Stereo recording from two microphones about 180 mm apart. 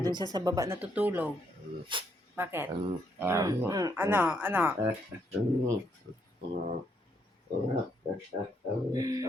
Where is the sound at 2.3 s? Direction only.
10° right (ahead or behind).